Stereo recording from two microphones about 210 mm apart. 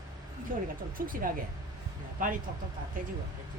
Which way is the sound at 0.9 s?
40° right (ahead or behind).